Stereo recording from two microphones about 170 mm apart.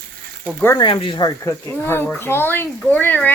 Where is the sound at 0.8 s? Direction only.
30° left (ahead or behind).